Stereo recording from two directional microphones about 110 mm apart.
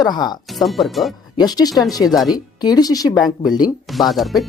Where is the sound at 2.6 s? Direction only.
35° left (ahead or behind).